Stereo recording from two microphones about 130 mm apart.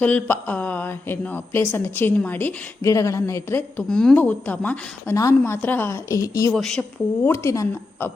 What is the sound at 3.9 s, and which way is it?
A woman's voice, 5° left (ahead or behind).